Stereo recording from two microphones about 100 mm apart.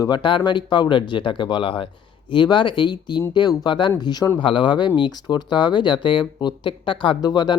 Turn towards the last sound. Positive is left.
turn(degrees=45)  # may be behind; listen again after turning